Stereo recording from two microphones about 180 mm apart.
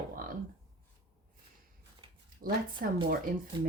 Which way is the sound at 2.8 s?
50° right (ahead or behind).